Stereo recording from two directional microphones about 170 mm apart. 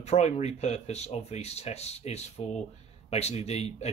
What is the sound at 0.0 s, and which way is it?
Speech, 40° left (ahead or behind).